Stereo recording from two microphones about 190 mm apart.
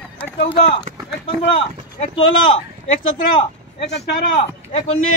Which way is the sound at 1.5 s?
30° left (ahead or behind).